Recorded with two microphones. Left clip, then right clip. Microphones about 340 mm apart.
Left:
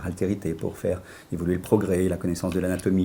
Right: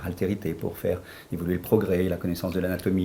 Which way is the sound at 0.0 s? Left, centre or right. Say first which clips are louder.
Left 1 dB; left.